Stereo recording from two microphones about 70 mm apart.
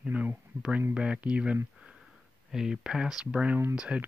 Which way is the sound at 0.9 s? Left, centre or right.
Centre.